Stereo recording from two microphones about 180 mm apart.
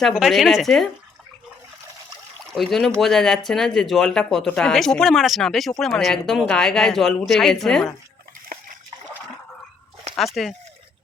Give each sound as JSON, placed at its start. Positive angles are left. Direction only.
{"t": 0.0, "sound": "speech", "side_deg": 0}
{"t": 2.5, "sound": "speech", "side_deg": 0}
{"t": 10.1, "sound": "a sound", "side_deg": -40}